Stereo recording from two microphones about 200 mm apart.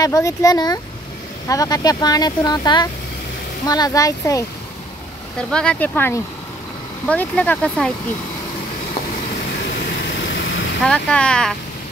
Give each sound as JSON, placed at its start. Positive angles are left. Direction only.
{"t": 0.0, "sound": "speech", "side_deg": 15}
{"t": 5.5, "sound": "speech", "side_deg": 5}
{"t": 10.8, "sound": "speech", "side_deg": 5}